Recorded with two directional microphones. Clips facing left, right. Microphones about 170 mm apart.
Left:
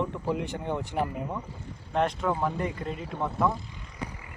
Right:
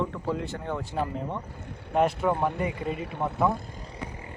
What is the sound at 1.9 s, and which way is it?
Speech, 5° right (ahead or behind).